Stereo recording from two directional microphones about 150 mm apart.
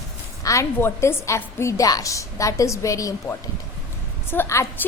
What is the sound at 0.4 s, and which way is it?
A woman's voice, 20° left (ahead or behind).